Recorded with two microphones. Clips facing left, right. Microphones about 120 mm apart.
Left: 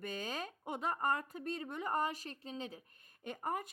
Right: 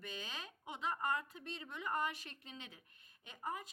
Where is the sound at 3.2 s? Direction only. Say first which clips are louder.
Left 6 dB; 50° left (ahead or behind).